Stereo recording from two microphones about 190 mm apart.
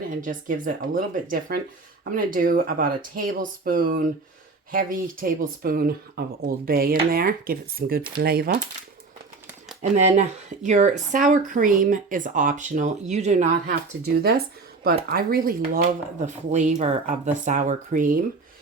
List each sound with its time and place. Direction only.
0.1 s speech: 45° right (ahead or behind)
9.8 s speech: 35° right (ahead or behind)
14.2 s speech: 55° right (ahead or behind)